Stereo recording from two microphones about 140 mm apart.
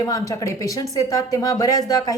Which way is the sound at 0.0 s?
25° left (ahead or behind).